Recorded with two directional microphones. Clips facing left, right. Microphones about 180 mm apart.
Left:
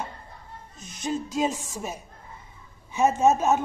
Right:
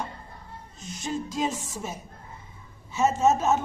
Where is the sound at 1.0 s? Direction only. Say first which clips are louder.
Left 3 dB; 15° left (ahead or behind).